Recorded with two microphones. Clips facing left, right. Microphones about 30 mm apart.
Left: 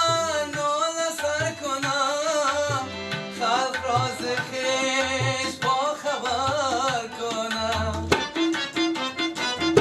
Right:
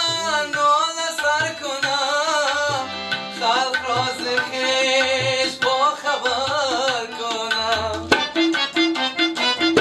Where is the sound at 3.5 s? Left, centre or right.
Right.